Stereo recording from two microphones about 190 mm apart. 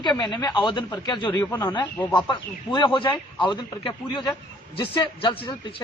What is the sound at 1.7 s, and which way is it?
Speech, 25° left (ahead or behind).